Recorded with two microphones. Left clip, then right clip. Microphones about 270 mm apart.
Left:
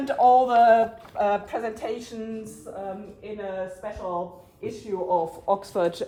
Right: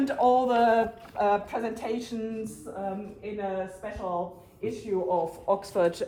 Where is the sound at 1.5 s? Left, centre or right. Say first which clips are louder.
Left 2 dB; left.